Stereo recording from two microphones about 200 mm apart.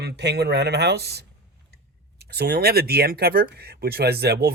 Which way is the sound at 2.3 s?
50° right (ahead or behind).